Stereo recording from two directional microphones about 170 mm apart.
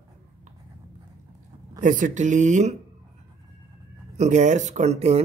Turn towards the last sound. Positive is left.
turn(degrees=-40)  # may be behind; listen again after turning